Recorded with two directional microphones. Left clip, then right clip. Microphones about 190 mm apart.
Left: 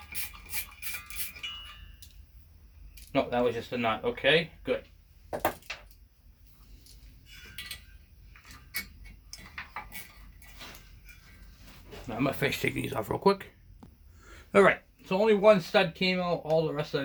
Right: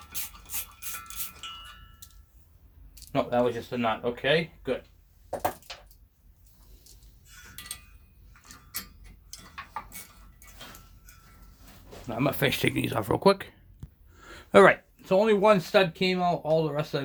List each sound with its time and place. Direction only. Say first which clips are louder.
3.1 s speech: right 2 dB; 35° right (ahead or behind)
12.0 s speech: right 3 dB; 40° right (ahead or behind)